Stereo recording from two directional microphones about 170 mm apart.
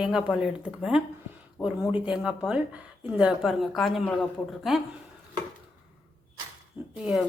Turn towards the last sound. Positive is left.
turn(degrees=-5)  # may be behind; listen again after turning